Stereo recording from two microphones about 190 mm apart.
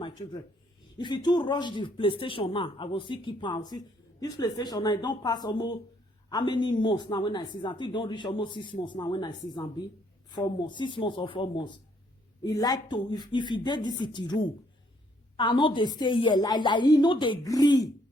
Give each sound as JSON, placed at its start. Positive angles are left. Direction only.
{"t": 0.9, "sound": "speech", "side_deg": 25}